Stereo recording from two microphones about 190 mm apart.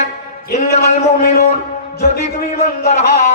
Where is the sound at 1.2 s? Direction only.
50° left (ahead or behind).